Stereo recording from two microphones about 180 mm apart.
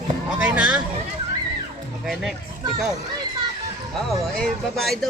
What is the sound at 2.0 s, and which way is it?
Speech, centre (ahead or behind).